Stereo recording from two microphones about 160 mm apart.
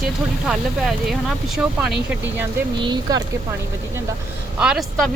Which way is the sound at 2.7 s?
30° right (ahead or behind).